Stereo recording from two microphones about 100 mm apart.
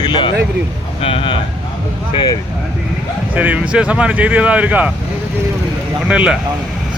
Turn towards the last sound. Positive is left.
turn(degrees=-10)  # may be behind; listen again after turning